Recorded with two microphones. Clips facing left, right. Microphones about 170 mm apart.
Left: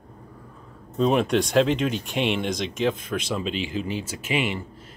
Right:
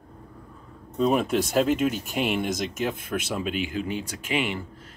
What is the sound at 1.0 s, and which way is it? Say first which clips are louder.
Speech: left 2 dB; 5° right (ahead or behind).